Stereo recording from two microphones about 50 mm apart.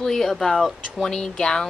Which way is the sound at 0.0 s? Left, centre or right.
Centre.